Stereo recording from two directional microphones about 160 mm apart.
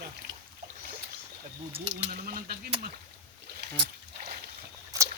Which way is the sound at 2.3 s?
60° right (ahead or behind).